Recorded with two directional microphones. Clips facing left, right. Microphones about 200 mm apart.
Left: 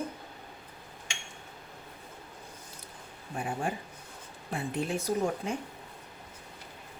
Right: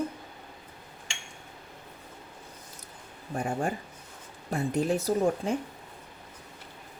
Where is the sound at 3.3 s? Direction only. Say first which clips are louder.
Right 3 dB; 45° right (ahead or behind).